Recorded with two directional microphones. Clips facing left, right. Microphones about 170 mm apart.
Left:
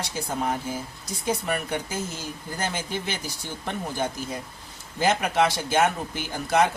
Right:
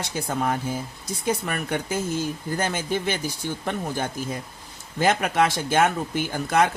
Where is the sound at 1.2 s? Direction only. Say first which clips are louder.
Even; 55° right (ahead or behind).